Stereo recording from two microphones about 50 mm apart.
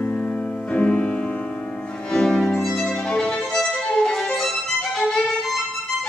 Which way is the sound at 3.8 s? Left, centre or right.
Centre.